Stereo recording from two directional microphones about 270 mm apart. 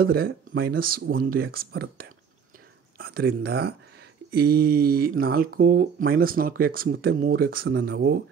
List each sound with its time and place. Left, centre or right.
0.0 s speech: right